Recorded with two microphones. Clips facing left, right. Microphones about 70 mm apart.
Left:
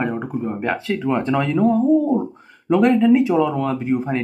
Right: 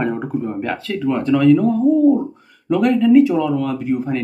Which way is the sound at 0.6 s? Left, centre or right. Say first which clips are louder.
Even; left.